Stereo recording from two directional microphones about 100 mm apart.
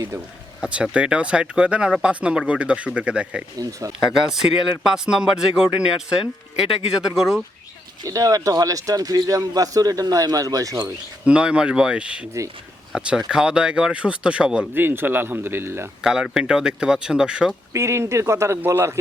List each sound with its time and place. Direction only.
0.6 s speech: 10° right (ahead or behind)
3.6 s a man's voice: 35° right (ahead or behind)
4.1 s speech: 5° right (ahead or behind)
7.0 s speech: 5° right (ahead or behind)
8.0 s a man's voice: 35° right (ahead or behind)
11.3 s speech: 10° right (ahead or behind)
14.7 s speech: 20° right (ahead or behind)
16.0 s speech: 5° right (ahead or behind)
17.7 s speech: 30° right (ahead or behind)